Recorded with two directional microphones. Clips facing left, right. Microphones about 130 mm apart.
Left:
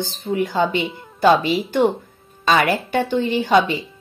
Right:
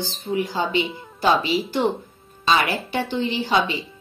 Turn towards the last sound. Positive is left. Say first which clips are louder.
# left 5 dB
turn(degrees=50)  # may be behind; listen again after turning